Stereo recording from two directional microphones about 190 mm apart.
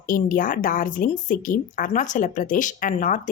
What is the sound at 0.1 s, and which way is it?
A woman's voice, 45° left (ahead or behind).